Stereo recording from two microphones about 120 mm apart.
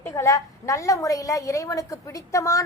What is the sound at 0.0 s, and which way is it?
A woman's voice, 25° left (ahead or behind).